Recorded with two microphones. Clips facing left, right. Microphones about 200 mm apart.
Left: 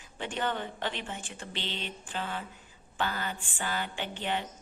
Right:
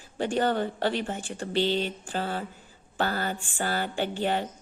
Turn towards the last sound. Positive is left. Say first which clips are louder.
# right 7 dB
turn(degrees=-40)  # may be behind; listen again after turning